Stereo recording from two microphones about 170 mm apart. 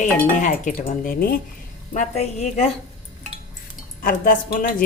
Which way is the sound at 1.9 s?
45° left (ahead or behind).